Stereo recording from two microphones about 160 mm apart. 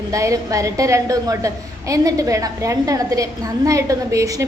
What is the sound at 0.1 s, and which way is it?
A woman's voice, 20° right (ahead or behind).